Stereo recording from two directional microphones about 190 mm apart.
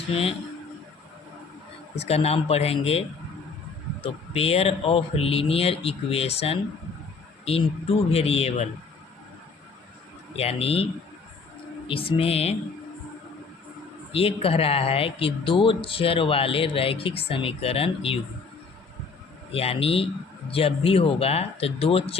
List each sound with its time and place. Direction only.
0.1 s a man's voice: 30° left (ahead or behind)
2.0 s a man's voice: 35° left (ahead or behind)
4.0 s a man's voice: 30° left (ahead or behind)
10.3 s a man's voice: 30° left (ahead or behind)
11.9 s speech: 30° left (ahead or behind)
14.1 s speech: 30° left (ahead or behind)
19.5 s a man's voice: 30° left (ahead or behind)